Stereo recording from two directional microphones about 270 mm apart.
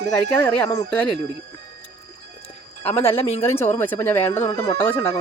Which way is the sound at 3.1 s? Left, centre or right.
Left.